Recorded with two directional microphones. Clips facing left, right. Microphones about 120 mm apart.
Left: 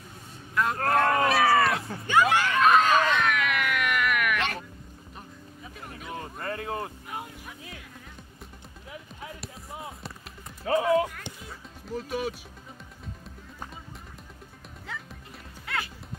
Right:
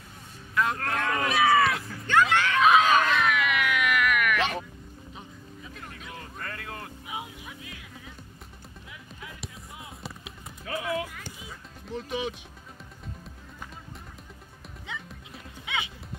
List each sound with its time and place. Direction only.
0.6 s vehicle: centre (ahead or behind)
1.1 s a sound: centre (ahead or behind)
2.6 s a sound: centre (ahead or behind)
6.0 s a sound: 30° left (ahead or behind)
7.1 s music: 5° right (ahead or behind)
9.7 s basketball bounce: 30° left (ahead or behind)
10.6 s speech: 30° left (ahead or behind)
11.3 s music: centre (ahead or behind)
14.9 s music: centre (ahead or behind)